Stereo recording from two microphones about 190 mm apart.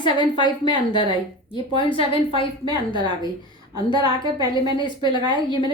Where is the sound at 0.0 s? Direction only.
25° left (ahead or behind).